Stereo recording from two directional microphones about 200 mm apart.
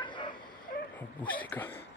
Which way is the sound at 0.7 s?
45° left (ahead or behind).